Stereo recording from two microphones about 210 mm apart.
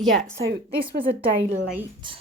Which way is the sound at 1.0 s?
25° right (ahead or behind).